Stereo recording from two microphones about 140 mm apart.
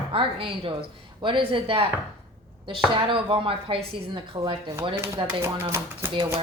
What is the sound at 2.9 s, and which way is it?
A woman's voice, 35° right (ahead or behind).